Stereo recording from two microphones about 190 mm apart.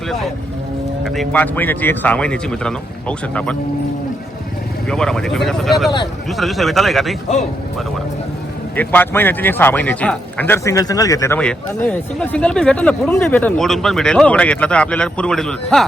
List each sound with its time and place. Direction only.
1.0 s speech: centre (ahead or behind)
4.9 s speech: 5° left (ahead or behind)
8.7 s speech: 10° left (ahead or behind)